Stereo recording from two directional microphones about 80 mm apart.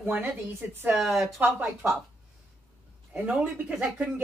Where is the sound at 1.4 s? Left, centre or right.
Right.